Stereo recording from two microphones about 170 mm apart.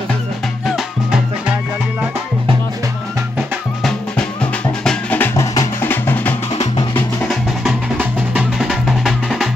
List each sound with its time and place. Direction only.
0.7 s music: centre (ahead or behind)
3.8 s music: 5° left (ahead or behind)
7.2 s music: 5° right (ahead or behind)